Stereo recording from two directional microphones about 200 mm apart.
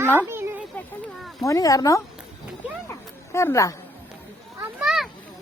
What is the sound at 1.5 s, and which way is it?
Speech, 15° left (ahead or behind).